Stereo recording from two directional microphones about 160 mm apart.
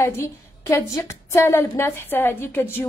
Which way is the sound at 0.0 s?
15° left (ahead or behind).